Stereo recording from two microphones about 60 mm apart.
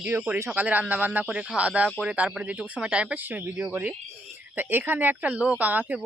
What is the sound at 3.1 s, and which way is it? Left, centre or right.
A woman's voice, right.